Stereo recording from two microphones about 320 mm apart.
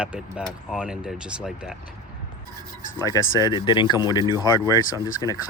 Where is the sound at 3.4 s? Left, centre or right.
Centre.